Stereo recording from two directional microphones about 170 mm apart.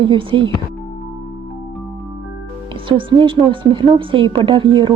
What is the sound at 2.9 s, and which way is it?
Speech, 30° right (ahead or behind).